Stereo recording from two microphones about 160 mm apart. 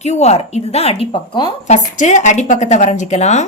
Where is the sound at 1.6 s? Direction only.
50° left (ahead or behind).